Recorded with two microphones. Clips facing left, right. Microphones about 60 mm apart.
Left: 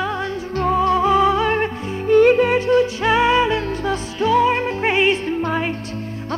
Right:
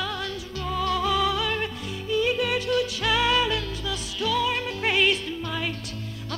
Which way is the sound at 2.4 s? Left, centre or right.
Left.